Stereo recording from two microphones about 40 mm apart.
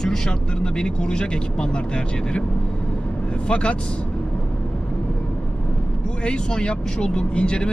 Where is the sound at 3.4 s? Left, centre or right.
Left.